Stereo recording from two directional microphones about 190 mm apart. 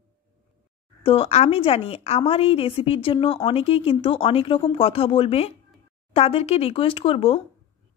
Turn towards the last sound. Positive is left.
turn(degrees=30)  # may be behind; listen again after turning